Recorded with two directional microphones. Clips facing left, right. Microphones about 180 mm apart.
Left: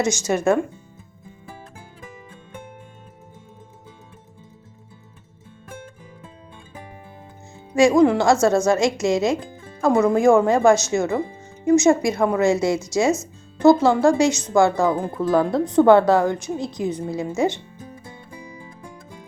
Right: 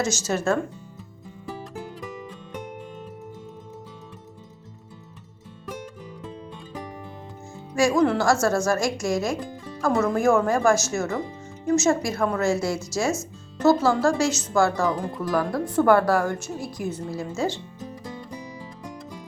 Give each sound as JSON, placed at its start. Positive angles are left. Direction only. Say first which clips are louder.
{"t": 0.0, "sound": "speech", "louder": "left 4 dB", "side_deg": 15}
{"t": 7.7, "sound": "a woman's voice", "louder": "left 5 dB", "side_deg": 20}